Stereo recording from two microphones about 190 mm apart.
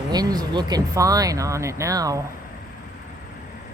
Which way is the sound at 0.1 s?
20° right (ahead or behind).